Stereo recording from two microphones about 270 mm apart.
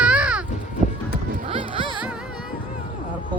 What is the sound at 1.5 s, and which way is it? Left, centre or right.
Music, centre.